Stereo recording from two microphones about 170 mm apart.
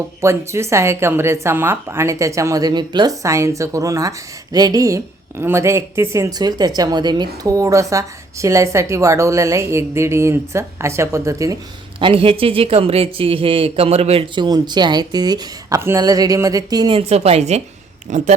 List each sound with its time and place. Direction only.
0.2 s speech: 15° right (ahead or behind)
11.9 s speech: 30° right (ahead or behind)
17.1 s speech: 40° right (ahead or behind)